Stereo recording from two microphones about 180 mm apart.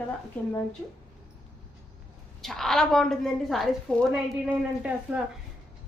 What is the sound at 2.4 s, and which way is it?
A woman's voice, centre (ahead or behind).